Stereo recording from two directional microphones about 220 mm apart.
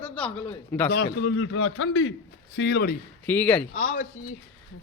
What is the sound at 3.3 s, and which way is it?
Speech, 10° left (ahead or behind).